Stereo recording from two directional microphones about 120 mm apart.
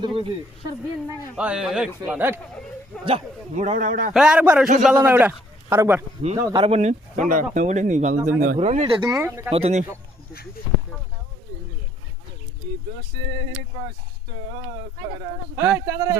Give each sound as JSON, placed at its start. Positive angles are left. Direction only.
{"t": 0.0, "sound": "speech", "side_deg": -45}
{"t": 1.4, "sound": "a man's voice", "side_deg": -5}
{"t": 2.0, "sound": "a man's voice", "side_deg": -15}
{"t": 3.5, "sound": "speech", "side_deg": -85}
{"t": 4.1, "sound": "a man's voice", "side_deg": -5}
{"t": 5.6, "sound": "speech", "side_deg": -25}
{"t": 6.6, "sound": "speech", "side_deg": -60}
{"t": 9.0, "sound": "speech", "side_deg": -25}
{"t": 9.5, "sound": "speech", "side_deg": -60}
{"t": 15.5, "sound": "speech", "side_deg": -25}